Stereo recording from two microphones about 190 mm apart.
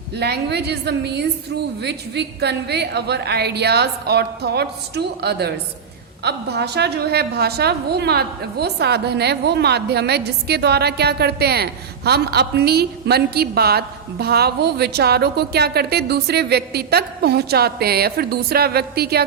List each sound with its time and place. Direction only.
0.2 s a woman's voice: 60° right (ahead or behind)